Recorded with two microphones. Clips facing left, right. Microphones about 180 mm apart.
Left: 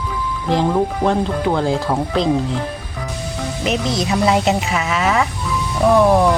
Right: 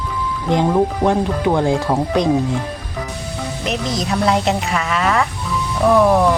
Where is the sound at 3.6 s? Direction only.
Centre (ahead or behind).